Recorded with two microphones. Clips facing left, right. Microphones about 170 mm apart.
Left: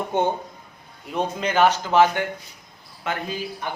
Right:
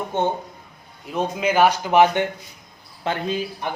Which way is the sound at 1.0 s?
5° right (ahead or behind).